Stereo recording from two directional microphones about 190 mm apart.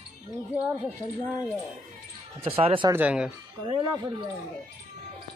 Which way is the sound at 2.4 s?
30° right (ahead or behind).